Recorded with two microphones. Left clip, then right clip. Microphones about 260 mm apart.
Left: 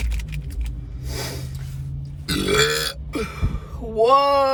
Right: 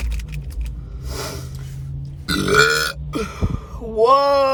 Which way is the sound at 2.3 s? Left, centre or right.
Centre.